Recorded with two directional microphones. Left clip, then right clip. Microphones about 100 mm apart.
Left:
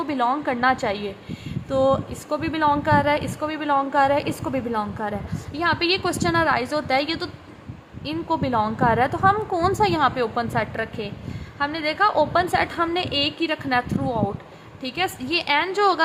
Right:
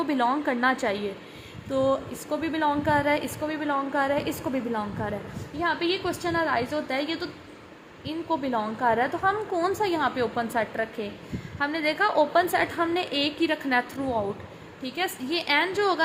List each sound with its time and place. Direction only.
0.0 s a woman's voice: 5° left (ahead or behind)
5.5 s a woman's voice: 30° left (ahead or behind); by 14.2 s 10° left (ahead or behind)
14.8 s a woman's voice: 30° left (ahead or behind)